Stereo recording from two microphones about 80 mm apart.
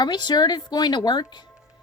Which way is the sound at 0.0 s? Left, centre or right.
Left.